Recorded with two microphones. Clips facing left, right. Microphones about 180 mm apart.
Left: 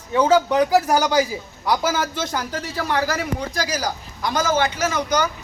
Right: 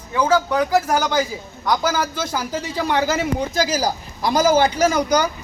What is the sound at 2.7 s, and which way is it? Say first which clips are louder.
Speech: right 3 dB; 20° right (ahead or behind).